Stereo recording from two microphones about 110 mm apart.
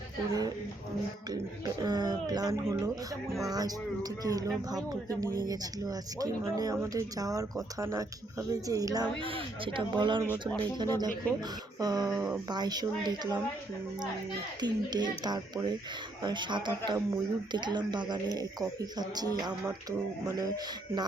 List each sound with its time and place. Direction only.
1.3 s speech: 40° right (ahead or behind)
9.1 s speech: 55° right (ahead or behind)
14.6 s speech: 40° right (ahead or behind)